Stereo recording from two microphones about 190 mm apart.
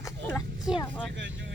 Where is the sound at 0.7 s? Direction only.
5° right (ahead or behind).